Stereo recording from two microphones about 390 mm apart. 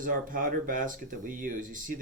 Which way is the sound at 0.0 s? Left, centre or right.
Right.